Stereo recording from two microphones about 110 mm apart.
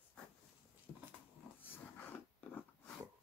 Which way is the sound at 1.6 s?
15° left (ahead or behind).